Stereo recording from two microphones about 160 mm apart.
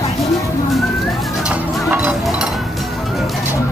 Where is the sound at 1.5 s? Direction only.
10° right (ahead or behind).